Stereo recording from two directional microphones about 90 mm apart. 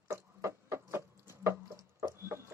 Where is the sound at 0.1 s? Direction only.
30° right (ahead or behind).